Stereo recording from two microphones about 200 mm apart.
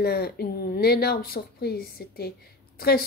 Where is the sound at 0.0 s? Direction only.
50° left (ahead or behind).